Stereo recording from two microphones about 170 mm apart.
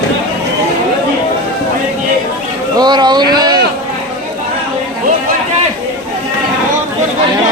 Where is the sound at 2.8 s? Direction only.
25° right (ahead or behind).